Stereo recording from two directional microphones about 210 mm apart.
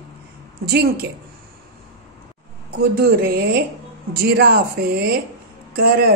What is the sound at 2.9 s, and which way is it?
A woman's voice, 45° right (ahead or behind).